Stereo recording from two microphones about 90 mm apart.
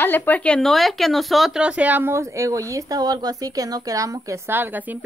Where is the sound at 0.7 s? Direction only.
Centre (ahead or behind); by 4.4 s 35° right (ahead or behind).